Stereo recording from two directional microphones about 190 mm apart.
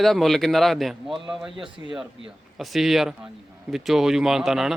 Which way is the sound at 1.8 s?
15° right (ahead or behind).